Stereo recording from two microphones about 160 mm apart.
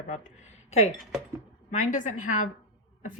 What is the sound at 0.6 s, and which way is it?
Speech, 45° left (ahead or behind).